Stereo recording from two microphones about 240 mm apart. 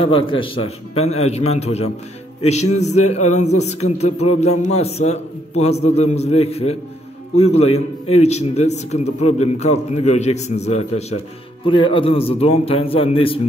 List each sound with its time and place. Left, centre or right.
0.0 s a man's voice: left